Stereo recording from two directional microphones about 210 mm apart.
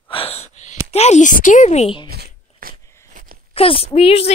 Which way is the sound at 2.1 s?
50° right (ahead or behind).